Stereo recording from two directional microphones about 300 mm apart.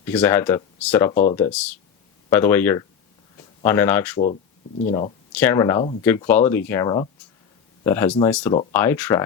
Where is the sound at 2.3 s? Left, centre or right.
Centre.